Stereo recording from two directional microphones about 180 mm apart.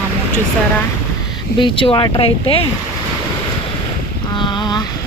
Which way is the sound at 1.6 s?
30° left (ahead or behind).